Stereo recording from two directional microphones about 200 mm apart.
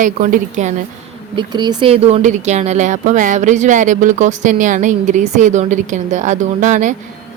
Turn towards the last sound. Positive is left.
turn(degrees=-40)  # may be behind; listen again after turning